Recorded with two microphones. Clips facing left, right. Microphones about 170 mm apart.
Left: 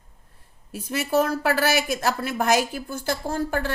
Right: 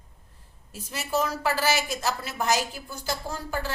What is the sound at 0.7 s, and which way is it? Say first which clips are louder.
Speech: left 6 dB; 60° left (ahead or behind).